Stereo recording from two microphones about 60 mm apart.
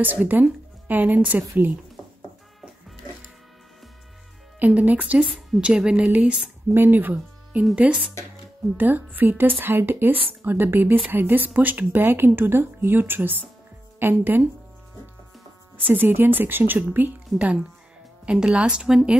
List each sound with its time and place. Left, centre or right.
0.0 s speech: right
4.6 s a woman's voice: right
6.7 s a woman's voice: right
15.8 s a woman's voice: right
18.2 s a woman's voice: centre